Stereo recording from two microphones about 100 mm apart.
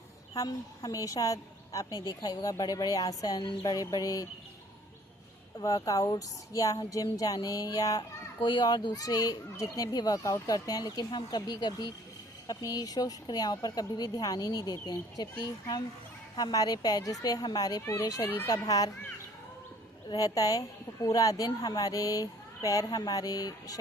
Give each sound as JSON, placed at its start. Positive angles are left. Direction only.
{"t": 0.3, "sound": "a woman's voice", "side_deg": 35}
{"t": 5.5, "sound": "a woman's voice", "side_deg": 40}
{"t": 20.1, "sound": "a woman's voice", "side_deg": 35}